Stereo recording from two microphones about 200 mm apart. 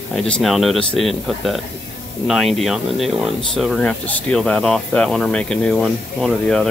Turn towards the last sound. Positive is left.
turn(degrees=0)  # may be behind; listen again after turning